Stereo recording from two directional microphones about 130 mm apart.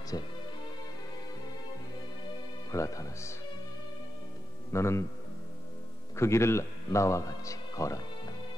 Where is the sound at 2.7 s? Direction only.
25° left (ahead or behind).